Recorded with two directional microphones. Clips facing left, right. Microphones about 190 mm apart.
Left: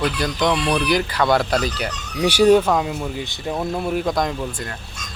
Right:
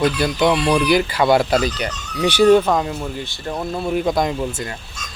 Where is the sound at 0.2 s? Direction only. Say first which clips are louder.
Right 3 dB; 5° right (ahead or behind).